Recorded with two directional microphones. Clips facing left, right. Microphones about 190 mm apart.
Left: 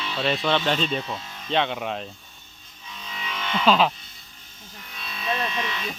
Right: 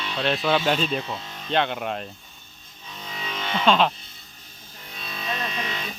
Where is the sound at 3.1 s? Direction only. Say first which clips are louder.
Right 1 dB; 35° right (ahead or behind).